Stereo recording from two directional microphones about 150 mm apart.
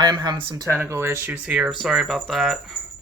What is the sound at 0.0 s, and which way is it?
Speech, 30° right (ahead or behind).